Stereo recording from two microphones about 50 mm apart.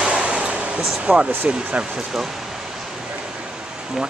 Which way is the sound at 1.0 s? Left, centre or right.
Right.